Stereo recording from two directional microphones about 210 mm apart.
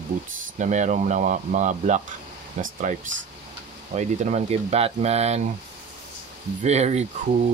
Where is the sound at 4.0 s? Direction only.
30° right (ahead or behind).